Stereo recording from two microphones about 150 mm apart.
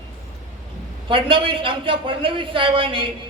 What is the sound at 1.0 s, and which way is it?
A woman's voice, 35° right (ahead or behind).